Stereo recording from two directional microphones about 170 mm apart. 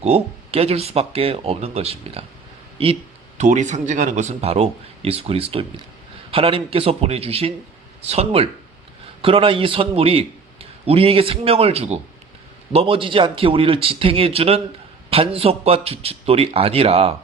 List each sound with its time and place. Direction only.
0.0 s speech: 35° right (ahead or behind)